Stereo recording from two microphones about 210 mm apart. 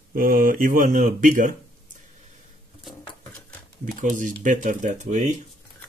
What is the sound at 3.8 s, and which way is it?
Speech, 40° right (ahead or behind).